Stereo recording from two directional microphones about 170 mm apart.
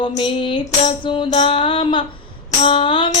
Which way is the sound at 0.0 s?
30° left (ahead or behind).